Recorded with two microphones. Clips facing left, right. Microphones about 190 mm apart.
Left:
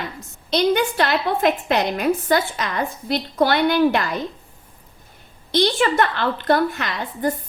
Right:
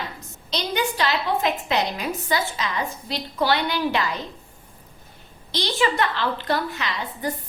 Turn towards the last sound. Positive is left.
turn(degrees=50)  # may be behind; listen again after turning